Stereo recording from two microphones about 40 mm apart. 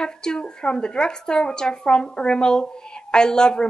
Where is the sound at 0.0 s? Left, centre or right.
Left.